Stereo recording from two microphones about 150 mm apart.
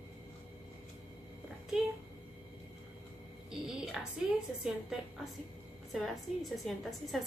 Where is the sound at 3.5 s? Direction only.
5° right (ahead or behind).